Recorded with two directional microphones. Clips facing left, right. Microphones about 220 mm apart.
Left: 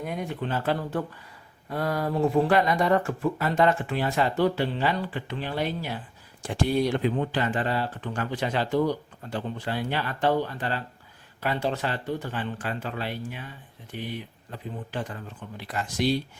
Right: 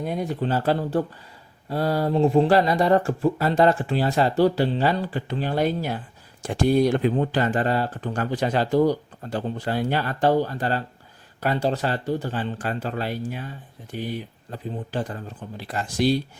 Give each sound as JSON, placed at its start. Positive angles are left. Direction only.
{"t": 0.0, "sound": "speech", "side_deg": -35}